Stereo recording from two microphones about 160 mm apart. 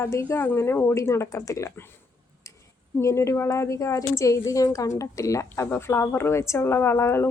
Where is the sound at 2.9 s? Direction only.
20° left (ahead or behind).